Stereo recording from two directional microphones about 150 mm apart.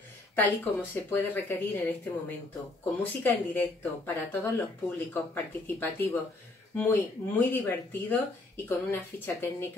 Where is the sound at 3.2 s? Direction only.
15° left (ahead or behind).